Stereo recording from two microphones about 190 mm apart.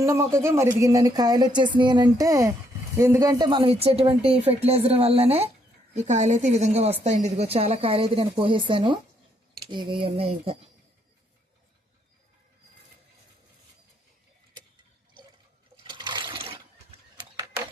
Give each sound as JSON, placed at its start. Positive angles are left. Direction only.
{"t": 0.0, "sound": "a woman's voice", "side_deg": -15}
{"t": 15.8, "sound": "water", "side_deg": -25}